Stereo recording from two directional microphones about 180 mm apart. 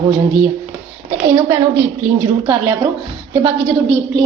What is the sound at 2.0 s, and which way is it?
A woman's voice, 15° right (ahead or behind).